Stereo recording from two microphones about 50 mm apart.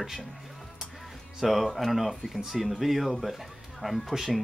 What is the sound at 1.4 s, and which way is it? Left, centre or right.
Speech, centre.